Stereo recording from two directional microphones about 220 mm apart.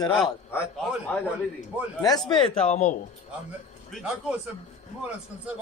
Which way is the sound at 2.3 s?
30° left (ahead or behind).